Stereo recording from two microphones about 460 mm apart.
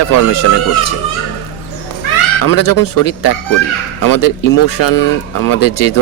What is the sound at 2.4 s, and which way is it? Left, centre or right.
Speech, left.